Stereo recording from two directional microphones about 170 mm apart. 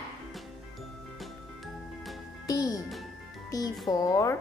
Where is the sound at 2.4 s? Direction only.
20° left (ahead or behind).